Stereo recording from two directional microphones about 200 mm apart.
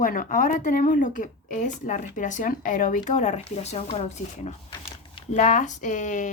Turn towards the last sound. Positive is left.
turn(degrees=40)  # may be behind; listen again after turning